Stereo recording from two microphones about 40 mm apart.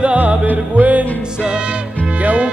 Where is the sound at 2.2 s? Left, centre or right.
Right.